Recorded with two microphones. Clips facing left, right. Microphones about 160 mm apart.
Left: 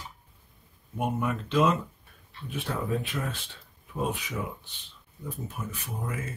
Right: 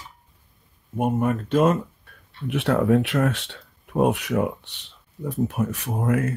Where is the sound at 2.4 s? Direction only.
70° right (ahead or behind).